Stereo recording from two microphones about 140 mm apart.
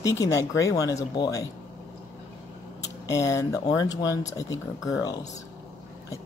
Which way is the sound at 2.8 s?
25° left (ahead or behind).